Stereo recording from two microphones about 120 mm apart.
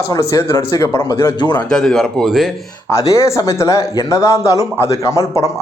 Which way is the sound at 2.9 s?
25° left (ahead or behind).